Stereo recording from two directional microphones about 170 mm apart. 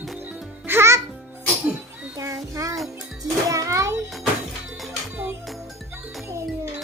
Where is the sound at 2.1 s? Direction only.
20° right (ahead or behind).